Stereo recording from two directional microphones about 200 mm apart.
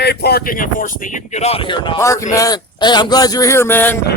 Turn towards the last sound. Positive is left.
turn(degrees=10)  # may be behind; listen again after turning